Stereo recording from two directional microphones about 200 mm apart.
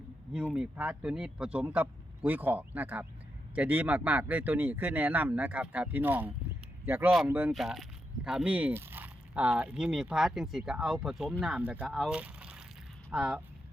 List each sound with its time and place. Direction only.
0.3 s speech: 5° right (ahead or behind)